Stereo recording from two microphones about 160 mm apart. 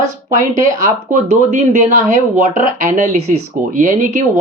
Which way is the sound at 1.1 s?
50° right (ahead or behind).